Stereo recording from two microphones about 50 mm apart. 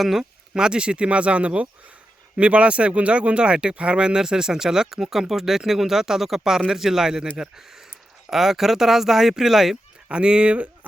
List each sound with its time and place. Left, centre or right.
0.0 s speech: centre
8.3 s speech: centre
10.1 s speech: centre